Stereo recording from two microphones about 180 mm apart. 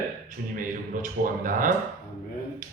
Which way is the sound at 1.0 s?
50° right (ahead or behind).